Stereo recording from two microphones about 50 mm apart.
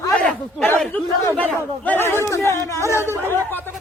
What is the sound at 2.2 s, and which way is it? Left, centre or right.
Speech, left.